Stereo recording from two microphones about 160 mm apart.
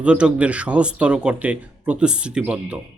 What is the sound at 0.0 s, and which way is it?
Speech, 5° right (ahead or behind).